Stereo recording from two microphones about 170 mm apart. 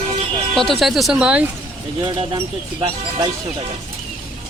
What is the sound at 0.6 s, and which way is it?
Speech, centre (ahead or behind).